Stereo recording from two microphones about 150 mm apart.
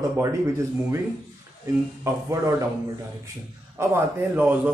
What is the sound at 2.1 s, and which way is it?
Speech, 20° right (ahead or behind).